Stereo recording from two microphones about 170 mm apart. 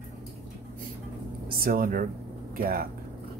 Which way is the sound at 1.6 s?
55° right (ahead or behind).